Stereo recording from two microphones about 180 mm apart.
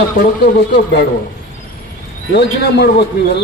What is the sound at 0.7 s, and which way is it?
Speech, 70° left (ahead or behind).